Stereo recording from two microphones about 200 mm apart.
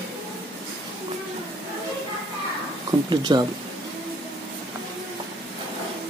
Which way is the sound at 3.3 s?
20° right (ahead or behind).